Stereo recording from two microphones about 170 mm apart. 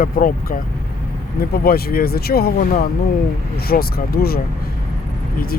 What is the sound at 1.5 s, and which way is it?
Speech, 60° left (ahead or behind).